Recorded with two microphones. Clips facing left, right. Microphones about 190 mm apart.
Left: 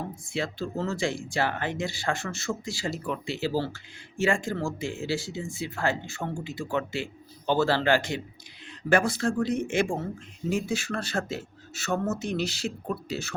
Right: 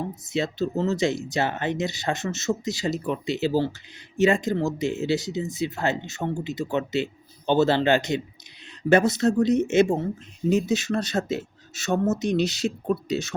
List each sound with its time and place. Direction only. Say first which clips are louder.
0.3 s speech: right 6 dB; 20° right (ahead or behind)